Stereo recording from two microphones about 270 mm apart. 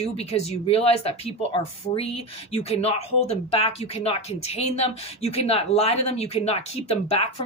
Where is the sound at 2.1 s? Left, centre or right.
Left.